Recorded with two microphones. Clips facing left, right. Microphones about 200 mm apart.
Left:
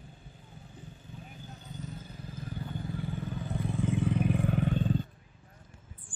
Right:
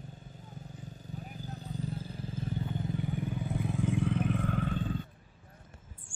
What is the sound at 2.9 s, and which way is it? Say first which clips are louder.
Vehicle: right 1 dB; 20° right (ahead or behind).